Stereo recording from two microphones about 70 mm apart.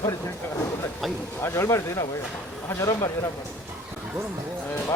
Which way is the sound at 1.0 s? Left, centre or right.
Centre.